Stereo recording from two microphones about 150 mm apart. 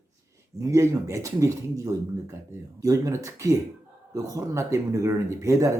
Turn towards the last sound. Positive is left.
turn(degrees=-20)  # may be behind; listen again after turning